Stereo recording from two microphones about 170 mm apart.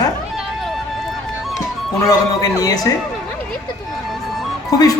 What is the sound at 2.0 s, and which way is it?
Speech, 20° left (ahead or behind).